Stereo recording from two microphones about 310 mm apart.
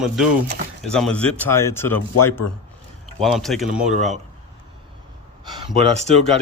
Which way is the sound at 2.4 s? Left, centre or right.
Left.